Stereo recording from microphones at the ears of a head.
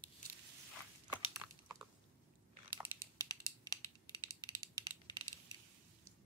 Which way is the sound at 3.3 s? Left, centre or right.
Right.